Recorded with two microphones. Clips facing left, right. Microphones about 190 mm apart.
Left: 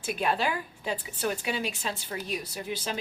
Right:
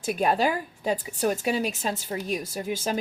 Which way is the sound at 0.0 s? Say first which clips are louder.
Right 5 dB; 40° right (ahead or behind).